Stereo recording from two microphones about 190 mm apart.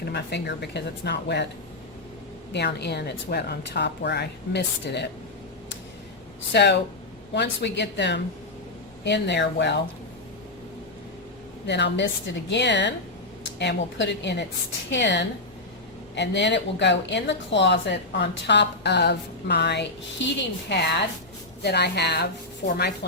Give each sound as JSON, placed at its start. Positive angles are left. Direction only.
{"t": 0.0, "sound": "a woman's voice", "side_deg": 60}
{"t": 2.5, "sound": "a woman's voice", "side_deg": 65}
{"t": 6.5, "sound": "a woman's voice", "side_deg": 60}
{"t": 11.6, "sound": "a woman's voice", "side_deg": 65}